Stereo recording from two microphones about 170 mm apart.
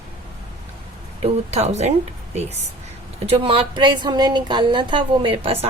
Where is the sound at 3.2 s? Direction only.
30° right (ahead or behind).